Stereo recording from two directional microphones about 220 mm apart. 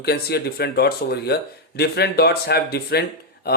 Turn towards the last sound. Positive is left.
turn(degrees=45)  # may be behind; listen again after turning